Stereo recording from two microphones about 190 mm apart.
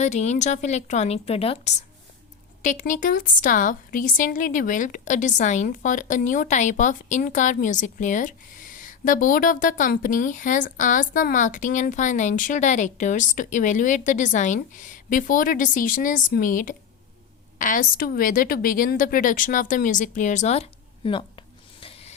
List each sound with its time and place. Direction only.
0.0 s a woman's voice: 35° left (ahead or behind)